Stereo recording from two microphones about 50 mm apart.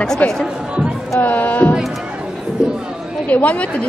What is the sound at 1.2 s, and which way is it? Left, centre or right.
Heart sounds, left.